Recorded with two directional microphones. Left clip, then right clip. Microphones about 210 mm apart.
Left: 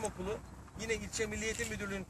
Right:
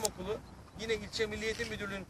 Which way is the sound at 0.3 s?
5° left (ahead or behind).